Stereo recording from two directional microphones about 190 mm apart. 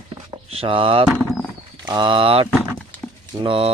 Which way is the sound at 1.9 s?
25° right (ahead or behind).